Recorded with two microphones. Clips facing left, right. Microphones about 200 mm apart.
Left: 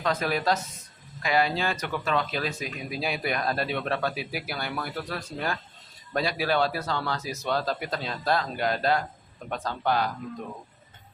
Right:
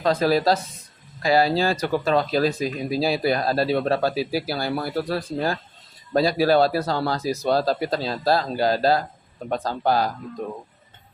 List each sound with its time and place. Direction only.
0.0 s speech: 35° right (ahead or behind)